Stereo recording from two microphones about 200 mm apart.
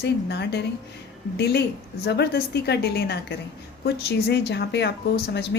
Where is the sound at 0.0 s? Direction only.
55° left (ahead or behind).